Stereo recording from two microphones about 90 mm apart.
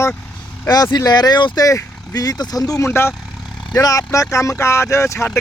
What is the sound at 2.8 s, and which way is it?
Speech, 30° left (ahead or behind).